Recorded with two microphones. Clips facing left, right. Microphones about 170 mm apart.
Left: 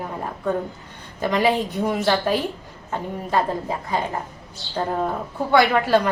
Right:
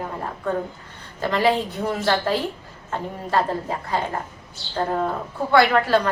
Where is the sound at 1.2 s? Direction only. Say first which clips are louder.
Even; 15° left (ahead or behind).